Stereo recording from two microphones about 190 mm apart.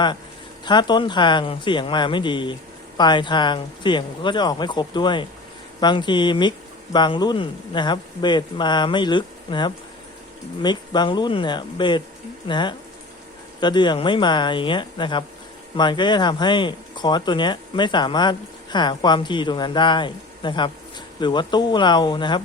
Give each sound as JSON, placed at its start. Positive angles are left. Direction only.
{"t": 0.6, "sound": "speech", "side_deg": 25}